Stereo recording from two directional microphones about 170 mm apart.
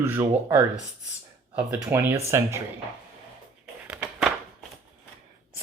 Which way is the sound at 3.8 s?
5° right (ahead or behind).